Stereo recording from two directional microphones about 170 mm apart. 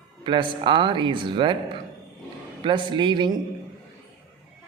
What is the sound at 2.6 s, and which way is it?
Speech, 30° right (ahead or behind).